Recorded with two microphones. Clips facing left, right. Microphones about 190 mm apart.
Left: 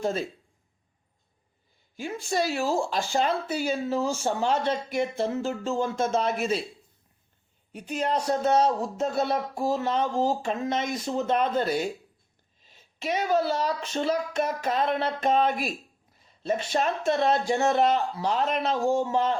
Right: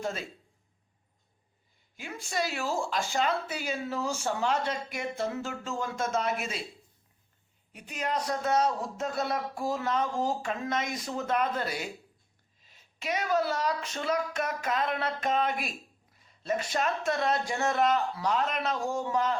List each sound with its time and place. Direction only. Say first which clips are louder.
2.0 s speech: left 6 dB; 30° left (ahead or behind)
7.7 s speech: left 5 dB; 30° left (ahead or behind)